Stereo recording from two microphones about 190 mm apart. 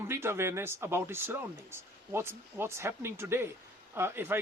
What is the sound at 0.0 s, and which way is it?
Speech, 15° right (ahead or behind).